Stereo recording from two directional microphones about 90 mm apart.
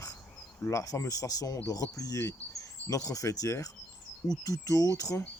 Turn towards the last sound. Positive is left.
turn(degrees=40)  # may be behind; listen again after turning